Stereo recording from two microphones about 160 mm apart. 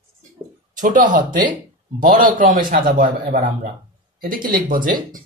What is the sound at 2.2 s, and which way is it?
Speech, 60° right (ahead or behind).